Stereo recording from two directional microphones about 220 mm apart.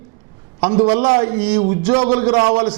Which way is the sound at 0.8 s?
25° right (ahead or behind).